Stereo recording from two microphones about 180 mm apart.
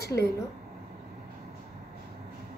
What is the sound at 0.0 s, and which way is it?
Speech, 65° left (ahead or behind).